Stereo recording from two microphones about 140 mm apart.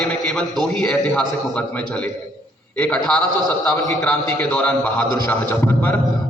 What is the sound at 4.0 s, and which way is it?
A man's voice, 10° left (ahead or behind).